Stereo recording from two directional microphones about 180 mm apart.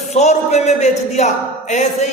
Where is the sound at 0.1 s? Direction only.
40° left (ahead or behind).